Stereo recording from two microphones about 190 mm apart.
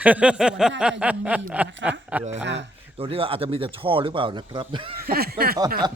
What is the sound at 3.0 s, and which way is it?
Speech, 30° right (ahead or behind).